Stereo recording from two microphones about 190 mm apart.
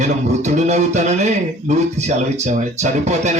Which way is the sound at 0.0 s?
40° right (ahead or behind).